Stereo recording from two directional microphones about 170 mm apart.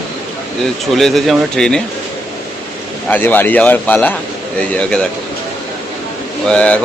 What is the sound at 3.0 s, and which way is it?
A man's voice, 10° left (ahead or behind).